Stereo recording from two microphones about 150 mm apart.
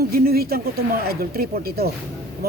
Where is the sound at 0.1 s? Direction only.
90° right.